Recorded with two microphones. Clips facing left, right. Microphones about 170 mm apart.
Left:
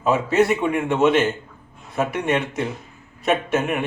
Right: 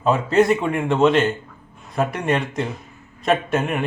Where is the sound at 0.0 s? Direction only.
5° left (ahead or behind).